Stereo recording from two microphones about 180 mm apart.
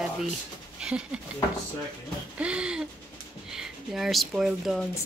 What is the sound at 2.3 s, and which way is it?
Speech, 5° right (ahead or behind).